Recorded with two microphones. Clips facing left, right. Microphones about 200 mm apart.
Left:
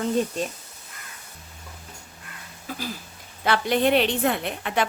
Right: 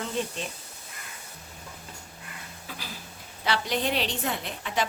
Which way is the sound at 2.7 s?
45° left (ahead or behind).